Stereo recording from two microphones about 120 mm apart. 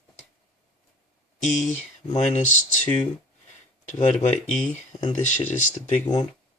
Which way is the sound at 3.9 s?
70° left (ahead or behind).